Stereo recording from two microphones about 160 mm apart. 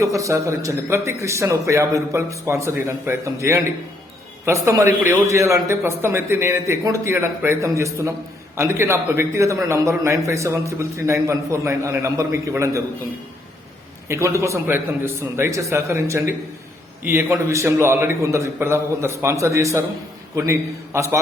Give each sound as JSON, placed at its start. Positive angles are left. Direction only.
{"t": 0.0, "sound": "a man's voice", "side_deg": -20}
{"t": 14.1, "sound": "a man's voice", "side_deg": -20}